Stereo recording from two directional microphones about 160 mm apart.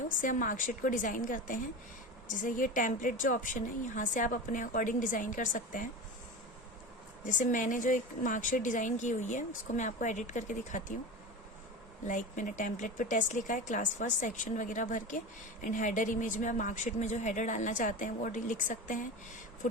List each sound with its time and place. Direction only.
0.2 s a woman's voice: 55° left (ahead or behind)
7.3 s speech: 50° left (ahead or behind)
12.0 s speech: 55° left (ahead or behind)